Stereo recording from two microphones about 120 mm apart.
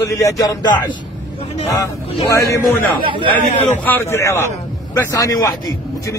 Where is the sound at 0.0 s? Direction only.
25° left (ahead or behind).